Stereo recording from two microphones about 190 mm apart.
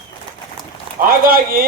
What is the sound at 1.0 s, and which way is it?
Speech, 50° right (ahead or behind).